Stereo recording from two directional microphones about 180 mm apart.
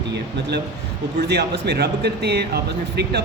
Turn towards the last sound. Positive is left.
turn(degrees=-65)  # may be behind; listen again after turning